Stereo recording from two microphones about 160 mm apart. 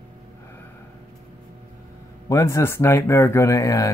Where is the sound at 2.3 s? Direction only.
20° left (ahead or behind).